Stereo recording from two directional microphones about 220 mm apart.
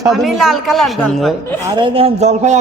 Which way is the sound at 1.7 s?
25° right (ahead or behind).